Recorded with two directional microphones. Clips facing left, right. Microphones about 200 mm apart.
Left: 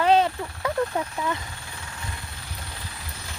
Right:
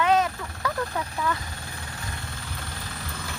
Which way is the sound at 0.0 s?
30° left (ahead or behind).